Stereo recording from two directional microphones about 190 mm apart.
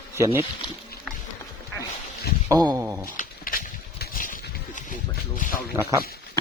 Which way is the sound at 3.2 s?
50° left (ahead or behind).